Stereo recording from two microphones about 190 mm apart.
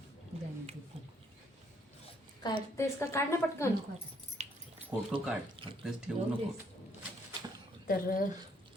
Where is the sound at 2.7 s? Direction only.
15° left (ahead or behind).